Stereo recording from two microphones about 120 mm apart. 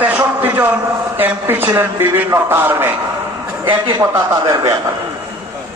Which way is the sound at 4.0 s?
25° right (ahead or behind).